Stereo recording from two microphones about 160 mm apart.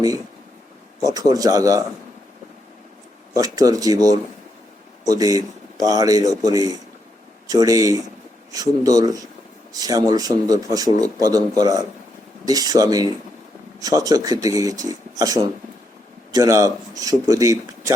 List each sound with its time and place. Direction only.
1.0 s a man's voice: 25° right (ahead or behind)
3.3 s a man's voice: 20° right (ahead or behind)